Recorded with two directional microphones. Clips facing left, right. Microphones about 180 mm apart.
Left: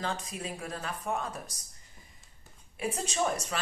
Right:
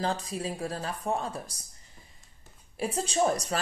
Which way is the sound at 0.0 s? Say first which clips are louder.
Right 5 dB; 35° right (ahead or behind).